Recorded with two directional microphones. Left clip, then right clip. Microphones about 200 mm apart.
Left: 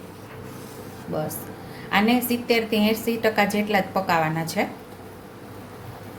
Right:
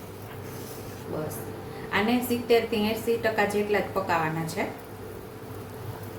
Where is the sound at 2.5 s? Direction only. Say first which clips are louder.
Left 2 dB; 45° left (ahead or behind).